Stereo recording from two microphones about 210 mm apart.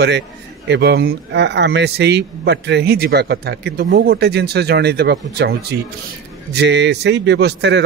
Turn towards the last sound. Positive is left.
turn(degrees=-55)  # may be behind; listen again after turning